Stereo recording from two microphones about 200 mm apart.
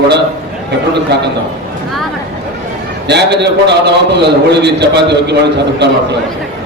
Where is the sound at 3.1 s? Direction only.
55° right (ahead or behind).